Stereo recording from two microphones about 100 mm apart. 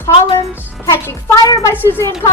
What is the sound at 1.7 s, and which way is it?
Speech, 20° left (ahead or behind).